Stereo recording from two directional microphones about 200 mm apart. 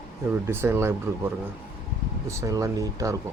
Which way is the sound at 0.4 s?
10° right (ahead or behind).